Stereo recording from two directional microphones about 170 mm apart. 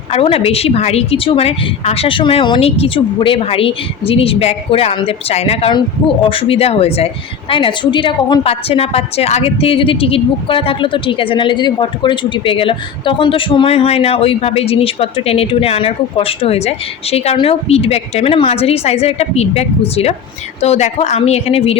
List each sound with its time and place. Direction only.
0.1 s a woman's voice: 35° left (ahead or behind)